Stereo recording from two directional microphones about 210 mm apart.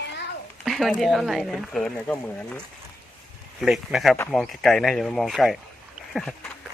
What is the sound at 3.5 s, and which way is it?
Speech, centre (ahead or behind).